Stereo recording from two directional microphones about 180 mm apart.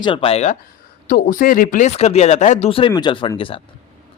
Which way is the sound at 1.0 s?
50° left (ahead or behind).